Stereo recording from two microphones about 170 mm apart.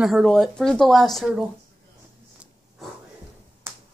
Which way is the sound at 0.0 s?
Centre (ahead or behind).